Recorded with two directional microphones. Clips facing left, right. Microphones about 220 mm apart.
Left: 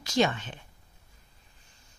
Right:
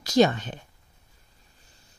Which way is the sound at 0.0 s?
40° right (ahead or behind).